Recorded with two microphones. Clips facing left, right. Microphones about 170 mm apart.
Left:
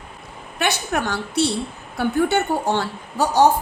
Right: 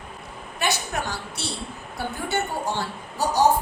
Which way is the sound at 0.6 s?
65° left (ahead or behind).